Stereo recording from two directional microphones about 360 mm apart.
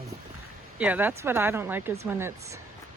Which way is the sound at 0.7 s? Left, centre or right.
Centre.